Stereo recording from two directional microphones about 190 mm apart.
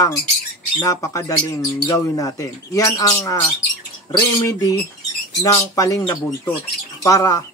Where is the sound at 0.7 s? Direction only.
15° left (ahead or behind).